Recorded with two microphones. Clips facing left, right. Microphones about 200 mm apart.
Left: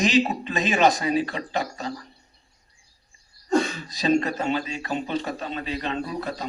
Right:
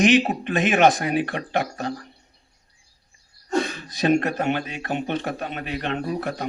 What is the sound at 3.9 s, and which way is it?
A man's voice, 55° right (ahead or behind).